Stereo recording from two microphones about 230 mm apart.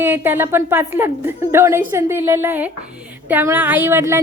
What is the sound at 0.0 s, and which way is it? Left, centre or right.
A woman's voice, centre.